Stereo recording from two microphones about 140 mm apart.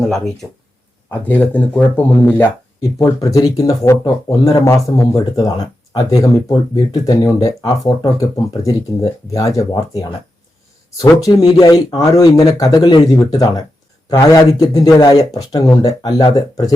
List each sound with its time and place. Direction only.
0.1 s speech: centre (ahead or behind)
1.2 s speech: 10° left (ahead or behind)
2.8 s speech: 25° left (ahead or behind)
11.3 s speech: 30° left (ahead or behind)